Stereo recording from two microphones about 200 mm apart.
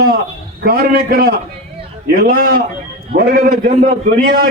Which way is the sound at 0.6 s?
50° right (ahead or behind).